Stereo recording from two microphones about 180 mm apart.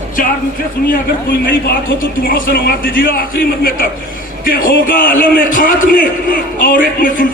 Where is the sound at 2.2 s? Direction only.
55° left (ahead or behind).